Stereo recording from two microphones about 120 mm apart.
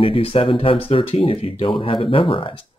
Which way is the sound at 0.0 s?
50° left (ahead or behind).